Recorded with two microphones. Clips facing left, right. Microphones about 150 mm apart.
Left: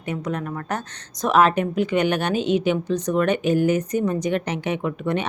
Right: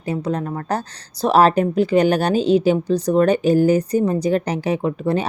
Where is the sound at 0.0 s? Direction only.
30° right (ahead or behind).